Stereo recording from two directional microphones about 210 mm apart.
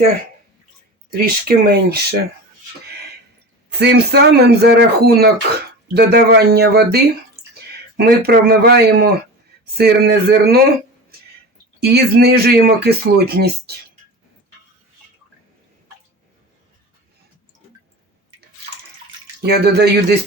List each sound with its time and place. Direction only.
1.1 s speech: 45° right (ahead or behind)
3.7 s speech: 50° right (ahead or behind)
11.8 s speech: 50° right (ahead or behind)
19.4 s speech: 50° right (ahead or behind)